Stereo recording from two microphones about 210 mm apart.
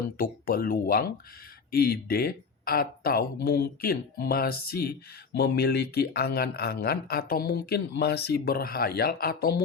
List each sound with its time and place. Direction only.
0.2 s speech: 45° left (ahead or behind)